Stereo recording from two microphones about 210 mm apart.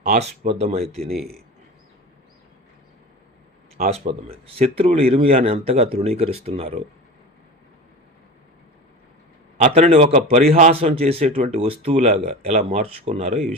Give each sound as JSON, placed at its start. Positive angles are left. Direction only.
{"t": 0.0, "sound": "speech", "side_deg": -35}
{"t": 3.9, "sound": "speech", "side_deg": -30}
{"t": 9.6, "sound": "speech", "side_deg": -30}